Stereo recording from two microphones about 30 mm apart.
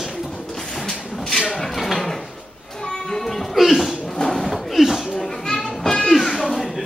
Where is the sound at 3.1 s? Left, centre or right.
Centre.